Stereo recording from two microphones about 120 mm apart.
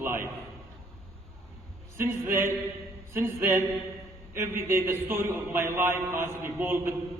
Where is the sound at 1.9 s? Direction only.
20° right (ahead or behind).